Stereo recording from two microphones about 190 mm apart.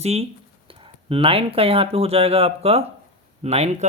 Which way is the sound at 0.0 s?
35° right (ahead or behind).